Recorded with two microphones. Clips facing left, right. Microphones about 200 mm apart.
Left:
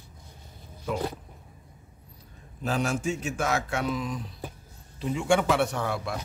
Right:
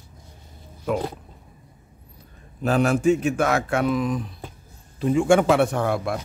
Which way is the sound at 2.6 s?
60° right (ahead or behind).